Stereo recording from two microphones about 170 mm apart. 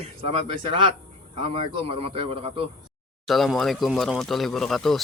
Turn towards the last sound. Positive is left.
turn(degrees=0)  # may be behind; listen again after turning